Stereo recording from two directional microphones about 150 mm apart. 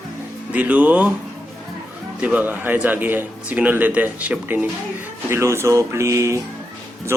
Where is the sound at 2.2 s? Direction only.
10° right (ahead or behind).